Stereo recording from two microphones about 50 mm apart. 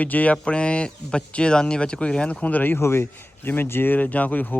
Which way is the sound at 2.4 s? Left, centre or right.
Left.